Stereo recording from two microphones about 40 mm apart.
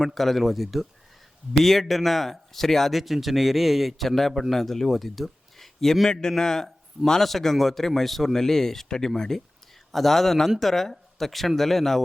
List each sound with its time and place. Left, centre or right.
0.1 s a man's voice: centre